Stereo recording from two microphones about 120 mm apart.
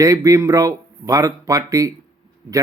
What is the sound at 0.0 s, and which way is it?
Speech, 30° right (ahead or behind).